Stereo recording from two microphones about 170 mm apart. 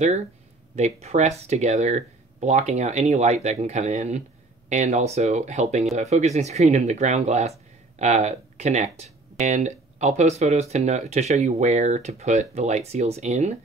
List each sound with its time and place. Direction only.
0.7 s speech: 40° right (ahead or behind)